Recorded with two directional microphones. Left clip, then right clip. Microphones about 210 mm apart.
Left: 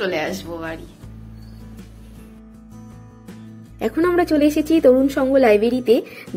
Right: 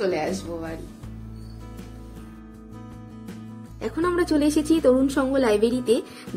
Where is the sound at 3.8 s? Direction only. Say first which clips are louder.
Left 6 dB; 15° left (ahead or behind).